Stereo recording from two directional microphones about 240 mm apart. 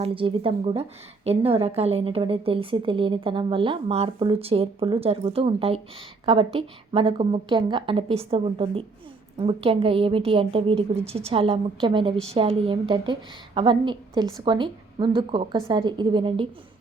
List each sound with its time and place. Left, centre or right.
0.0 s a woman's voice: right